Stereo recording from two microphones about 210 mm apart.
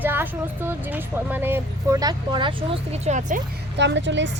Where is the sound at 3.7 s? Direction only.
55° right (ahead or behind).